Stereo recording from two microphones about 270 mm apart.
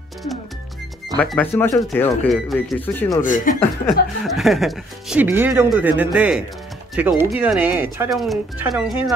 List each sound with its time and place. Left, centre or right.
1.1 s speech: centre
3.2 s speech: left
3.8 s speech: centre